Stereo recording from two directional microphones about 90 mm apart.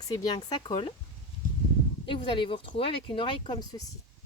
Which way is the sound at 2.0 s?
65° left (ahead or behind).